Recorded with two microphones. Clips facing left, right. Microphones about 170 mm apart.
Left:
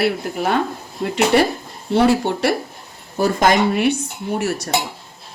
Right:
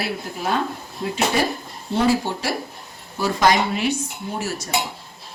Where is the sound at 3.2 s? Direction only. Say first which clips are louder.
Left 3 dB; 50° left (ahead or behind).